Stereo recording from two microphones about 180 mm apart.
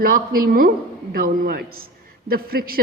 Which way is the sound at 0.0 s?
55° right (ahead or behind).